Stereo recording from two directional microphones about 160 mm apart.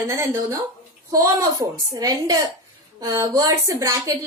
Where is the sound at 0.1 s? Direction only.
15° right (ahead or behind).